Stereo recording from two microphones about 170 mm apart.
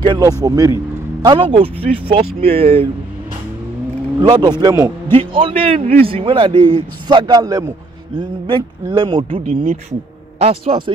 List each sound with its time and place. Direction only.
0.0 s speech: 25° right (ahead or behind)
4.2 s speech: 25° right (ahead or behind)
5.1 s speech: 30° right (ahead or behind)